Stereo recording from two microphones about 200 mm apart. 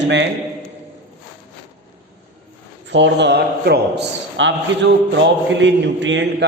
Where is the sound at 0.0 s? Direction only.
60° right (ahead or behind).